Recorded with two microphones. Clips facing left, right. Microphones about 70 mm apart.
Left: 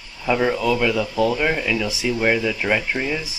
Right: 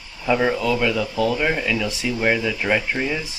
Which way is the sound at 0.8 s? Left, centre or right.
Centre.